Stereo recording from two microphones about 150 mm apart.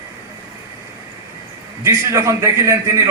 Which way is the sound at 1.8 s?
20° right (ahead or behind).